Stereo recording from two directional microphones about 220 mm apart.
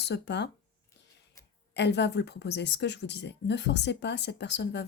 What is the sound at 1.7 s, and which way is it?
Speech, 50° left (ahead or behind).